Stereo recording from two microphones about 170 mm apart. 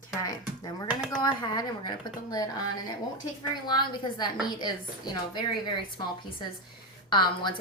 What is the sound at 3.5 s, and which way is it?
Speech, 25° left (ahead or behind).